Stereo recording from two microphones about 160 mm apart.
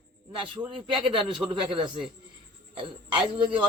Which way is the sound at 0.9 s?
30° right (ahead or behind).